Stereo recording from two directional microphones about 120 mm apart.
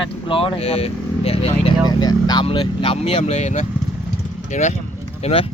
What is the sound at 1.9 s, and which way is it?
Speech, 35° left (ahead or behind).